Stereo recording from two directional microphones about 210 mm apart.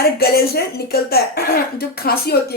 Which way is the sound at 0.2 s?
45° left (ahead or behind).